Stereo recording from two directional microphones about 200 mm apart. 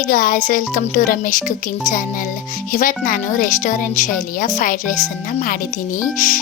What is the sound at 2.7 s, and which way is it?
Speech, 45° left (ahead or behind).